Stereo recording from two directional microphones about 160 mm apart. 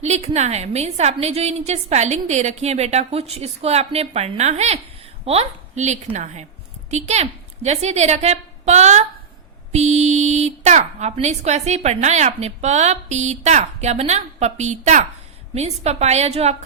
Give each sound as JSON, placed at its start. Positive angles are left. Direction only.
{"t": 0.0, "sound": "a woman's voice", "side_deg": -45}